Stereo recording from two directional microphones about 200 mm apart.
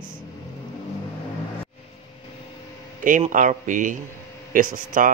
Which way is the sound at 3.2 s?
35° right (ahead or behind).